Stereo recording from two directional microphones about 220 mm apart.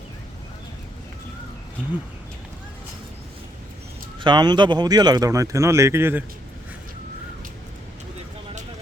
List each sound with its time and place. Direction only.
4.2 s speech: 20° right (ahead or behind)